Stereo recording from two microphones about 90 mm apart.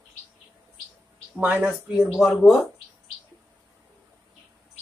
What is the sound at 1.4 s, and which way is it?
Speech, 20° right (ahead or behind).